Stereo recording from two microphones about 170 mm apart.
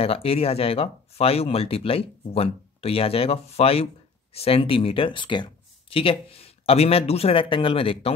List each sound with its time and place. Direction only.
0.0 s speech: 35° left (ahead or behind)